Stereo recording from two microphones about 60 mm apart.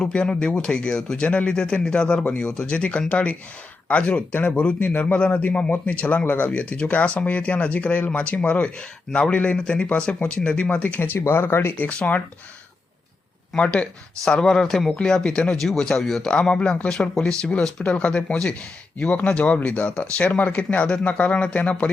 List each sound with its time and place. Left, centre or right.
0.0 s speech: centre; by 11.2 s left
11.2 s speech: left
14.3 s speech: centre